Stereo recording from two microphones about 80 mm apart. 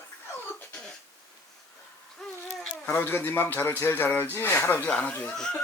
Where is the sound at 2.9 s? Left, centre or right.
Left.